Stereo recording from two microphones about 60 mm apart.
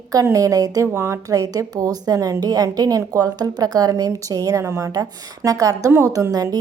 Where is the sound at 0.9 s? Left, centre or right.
Right.